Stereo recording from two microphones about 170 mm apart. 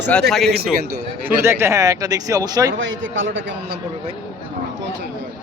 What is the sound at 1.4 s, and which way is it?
Speech, 15° right (ahead or behind).